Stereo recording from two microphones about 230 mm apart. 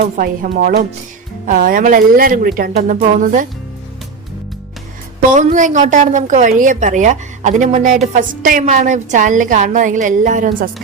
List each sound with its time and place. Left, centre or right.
0.2 s a woman's voice: right
5.3 s a woman's voice: right